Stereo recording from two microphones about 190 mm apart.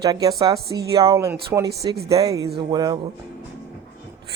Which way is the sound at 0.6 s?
60° right (ahead or behind).